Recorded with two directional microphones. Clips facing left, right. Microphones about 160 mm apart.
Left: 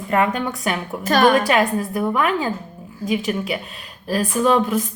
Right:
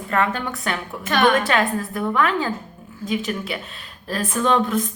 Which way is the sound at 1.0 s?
40° left (ahead or behind).